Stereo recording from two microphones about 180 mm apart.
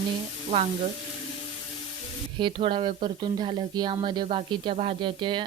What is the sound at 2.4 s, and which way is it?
Speech, 25° right (ahead or behind).